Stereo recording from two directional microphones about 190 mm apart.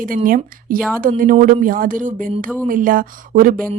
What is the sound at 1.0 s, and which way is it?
A woman's voice, 45° right (ahead or behind).